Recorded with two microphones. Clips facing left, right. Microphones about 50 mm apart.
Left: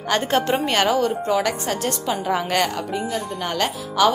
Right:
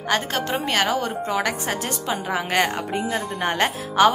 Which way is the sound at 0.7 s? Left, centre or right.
Centre.